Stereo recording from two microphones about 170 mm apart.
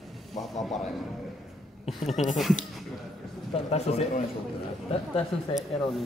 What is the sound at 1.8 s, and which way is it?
Speech, 40° left (ahead or behind).